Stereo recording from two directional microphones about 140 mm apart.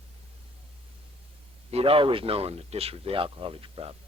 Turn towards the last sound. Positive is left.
turn(degrees=-40)  # may be behind; listen again after turning